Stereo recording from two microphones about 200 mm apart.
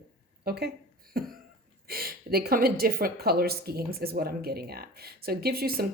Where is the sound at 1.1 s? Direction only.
45° right (ahead or behind).